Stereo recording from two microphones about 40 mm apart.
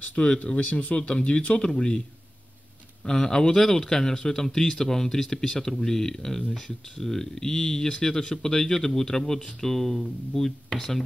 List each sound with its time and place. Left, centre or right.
0.1 s speech: left
0.6 s speech: left
0.9 s speech: left
3.1 s speech: centre